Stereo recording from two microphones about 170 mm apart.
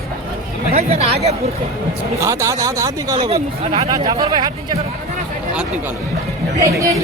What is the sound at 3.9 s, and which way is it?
Speech, 25° right (ahead or behind).